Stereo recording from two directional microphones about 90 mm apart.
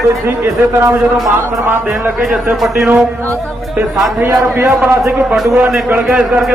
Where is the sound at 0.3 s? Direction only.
30° right (ahead or behind).